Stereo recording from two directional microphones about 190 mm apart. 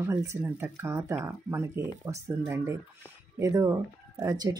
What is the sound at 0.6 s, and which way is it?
Speech, 15° right (ahead or behind).